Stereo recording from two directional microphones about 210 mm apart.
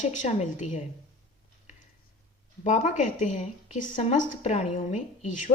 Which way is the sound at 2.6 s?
35° left (ahead or behind).